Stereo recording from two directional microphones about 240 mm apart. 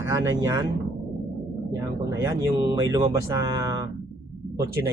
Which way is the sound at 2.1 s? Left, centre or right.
Centre.